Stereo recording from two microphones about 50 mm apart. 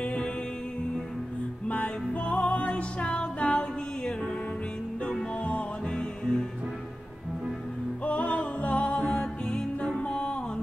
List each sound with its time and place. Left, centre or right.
0.0 s music: centre
1.7 s music: left
5.9 s music: centre
8.0 s music: left
9.0 s music: centre